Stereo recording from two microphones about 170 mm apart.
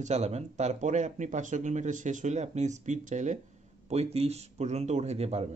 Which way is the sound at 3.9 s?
35° right (ahead or behind).